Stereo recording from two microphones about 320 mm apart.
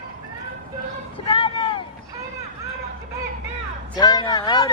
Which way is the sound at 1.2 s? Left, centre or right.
Centre.